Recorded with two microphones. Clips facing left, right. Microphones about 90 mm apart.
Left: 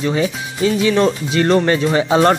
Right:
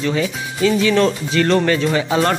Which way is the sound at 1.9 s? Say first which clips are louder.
Left 4 dB; 30° left (ahead or behind).